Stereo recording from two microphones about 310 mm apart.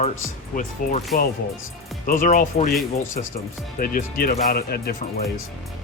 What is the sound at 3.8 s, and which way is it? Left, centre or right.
Speech, left.